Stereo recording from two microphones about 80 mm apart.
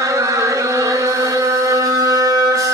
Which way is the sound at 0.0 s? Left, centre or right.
Right.